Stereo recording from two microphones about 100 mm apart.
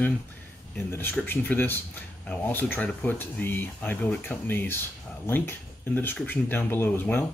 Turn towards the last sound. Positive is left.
turn(degrees=20)  # may be behind; listen again after turning